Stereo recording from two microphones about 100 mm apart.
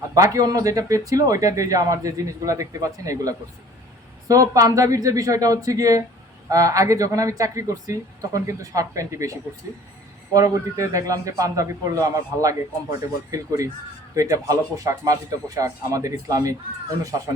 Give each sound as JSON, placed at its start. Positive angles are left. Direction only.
{"t": 0.1, "sound": "speech", "side_deg": -35}